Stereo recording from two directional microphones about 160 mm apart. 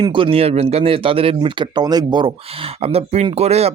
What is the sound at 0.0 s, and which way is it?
Speech, 30° right (ahead or behind).